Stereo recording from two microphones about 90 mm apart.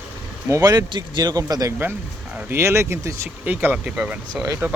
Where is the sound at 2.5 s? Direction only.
30° right (ahead or behind).